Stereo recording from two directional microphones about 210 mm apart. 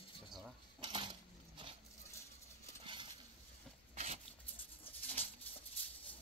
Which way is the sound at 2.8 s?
25° right (ahead or behind).